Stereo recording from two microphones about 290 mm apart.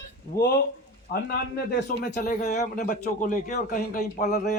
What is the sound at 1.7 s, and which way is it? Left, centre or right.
Speech, left.